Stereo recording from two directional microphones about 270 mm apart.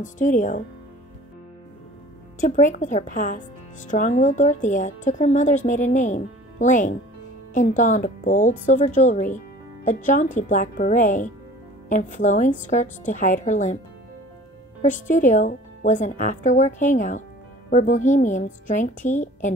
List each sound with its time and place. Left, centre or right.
0.0 s speech: left
2.4 s speech: left
14.8 s speech: left